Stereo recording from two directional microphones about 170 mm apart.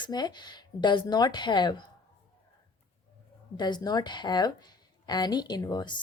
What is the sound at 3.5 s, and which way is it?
Speech, 25° left (ahead or behind).